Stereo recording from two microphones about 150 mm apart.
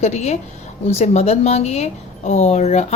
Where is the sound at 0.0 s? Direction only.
45° left (ahead or behind).